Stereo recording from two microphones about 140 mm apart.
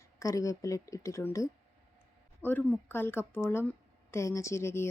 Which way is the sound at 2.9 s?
15° left (ahead or behind).